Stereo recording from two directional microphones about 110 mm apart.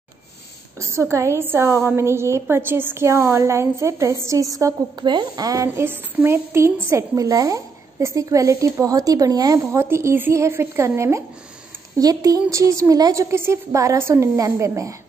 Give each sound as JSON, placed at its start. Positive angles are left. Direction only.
{"t": 0.7, "sound": "a woman's voice", "side_deg": -25}
{"t": 5.0, "sound": "a woman's voice", "side_deg": -40}
{"t": 9.7, "sound": "a woman's voice", "side_deg": -20}